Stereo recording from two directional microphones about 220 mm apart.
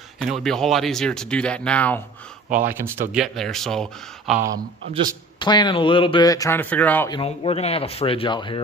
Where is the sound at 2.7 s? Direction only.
10° right (ahead or behind).